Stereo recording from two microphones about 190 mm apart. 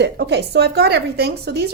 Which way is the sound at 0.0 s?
60° right (ahead or behind).